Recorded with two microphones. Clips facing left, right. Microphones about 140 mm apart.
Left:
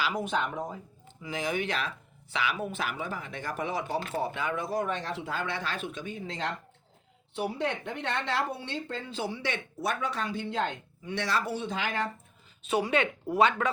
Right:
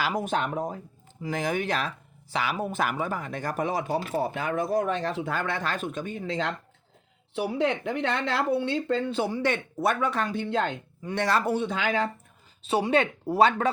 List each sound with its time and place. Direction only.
0.0 s speech: 45° right (ahead or behind); by 10.7 s 65° right (ahead or behind)
11.0 s speech: 50° right (ahead or behind); by 12.0 s 75° right (ahead or behind)
12.6 s speech: 30° right (ahead or behind)